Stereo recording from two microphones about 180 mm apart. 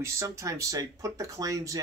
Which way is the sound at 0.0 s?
15° right (ahead or behind).